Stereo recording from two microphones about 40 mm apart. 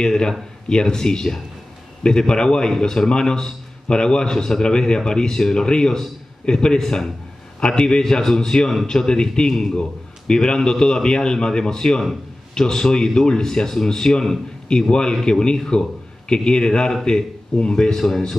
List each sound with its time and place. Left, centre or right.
0.0 s a man's voice: centre